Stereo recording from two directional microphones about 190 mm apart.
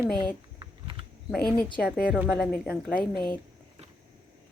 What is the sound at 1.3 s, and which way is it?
A woman's voice, 5° left (ahead or behind).